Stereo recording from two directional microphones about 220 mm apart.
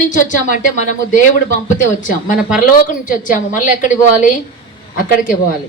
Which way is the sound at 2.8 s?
35° left (ahead or behind).